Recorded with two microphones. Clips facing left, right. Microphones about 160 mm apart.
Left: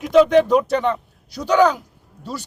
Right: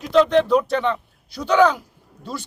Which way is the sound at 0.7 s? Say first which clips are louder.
Left 2 dB; 15° left (ahead or behind).